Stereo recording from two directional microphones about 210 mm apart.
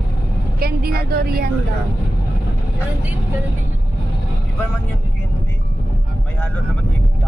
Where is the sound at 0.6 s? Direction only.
45° right (ahead or behind).